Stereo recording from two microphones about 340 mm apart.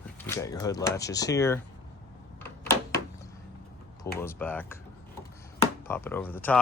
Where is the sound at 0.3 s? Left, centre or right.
Centre.